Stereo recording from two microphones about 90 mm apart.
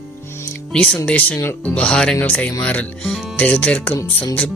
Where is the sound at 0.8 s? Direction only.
15° left (ahead or behind).